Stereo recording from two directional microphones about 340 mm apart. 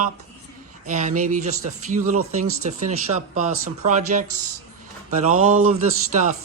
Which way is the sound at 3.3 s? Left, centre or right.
Right.